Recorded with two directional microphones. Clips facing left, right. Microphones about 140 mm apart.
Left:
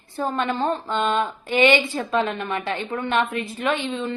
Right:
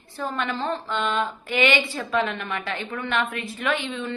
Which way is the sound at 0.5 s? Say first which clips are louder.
Left 4 dB; 45° left (ahead or behind).